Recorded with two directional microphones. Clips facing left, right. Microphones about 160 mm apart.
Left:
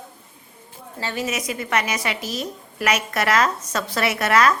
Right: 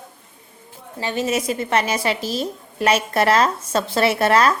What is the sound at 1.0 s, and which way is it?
Speech, 20° right (ahead or behind).